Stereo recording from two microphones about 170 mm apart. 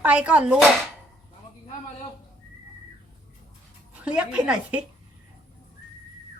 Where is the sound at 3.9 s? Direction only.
5° right (ahead or behind).